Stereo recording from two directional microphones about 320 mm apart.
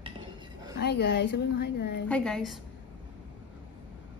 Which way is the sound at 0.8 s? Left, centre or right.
Left.